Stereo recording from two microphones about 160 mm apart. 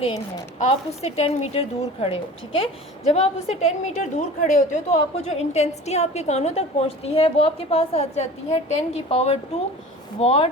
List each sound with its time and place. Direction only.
0.6 s a woman's voice: 40° left (ahead or behind)